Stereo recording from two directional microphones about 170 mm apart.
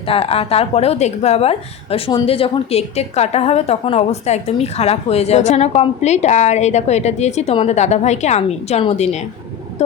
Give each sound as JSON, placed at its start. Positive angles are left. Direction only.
{"t": 0.1, "sound": "a woman's voice", "side_deg": 35}